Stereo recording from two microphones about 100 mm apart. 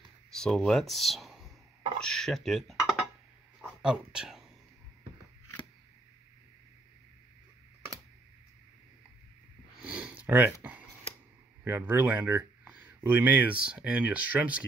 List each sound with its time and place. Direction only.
0.3 s speech: 5° left (ahead or behind)
9.8 s a sound: 15° right (ahead or behind)
11.6 s speech: 20° right (ahead or behind)